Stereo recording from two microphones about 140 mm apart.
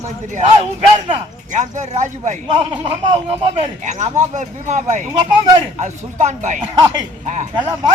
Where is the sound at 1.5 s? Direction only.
60° right (ahead or behind).